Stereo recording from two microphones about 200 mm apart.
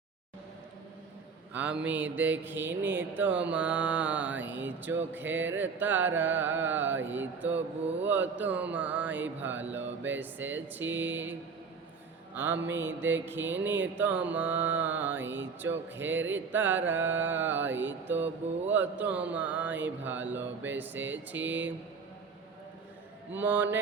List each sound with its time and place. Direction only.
1.5 s mantra: 5° right (ahead or behind)
12.3 s speech: 10° right (ahead or behind)
12.7 s mantra: 10° right (ahead or behind)
15.2 s a sound: 70° right (ahead or behind)
15.6 s mantra: 10° right (ahead or behind)
23.4 s mantra: 10° right (ahead or behind)